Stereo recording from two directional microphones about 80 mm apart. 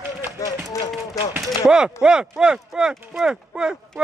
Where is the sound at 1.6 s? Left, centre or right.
Centre.